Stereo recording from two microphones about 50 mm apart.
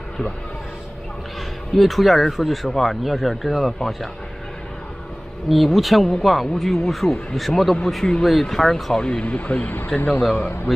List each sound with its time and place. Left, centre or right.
1.7 s speech: centre
5.5 s speech: centre
8.0 s a man's voice: centre
8.9 s a man's voice: centre
9.2 s a man's voice: left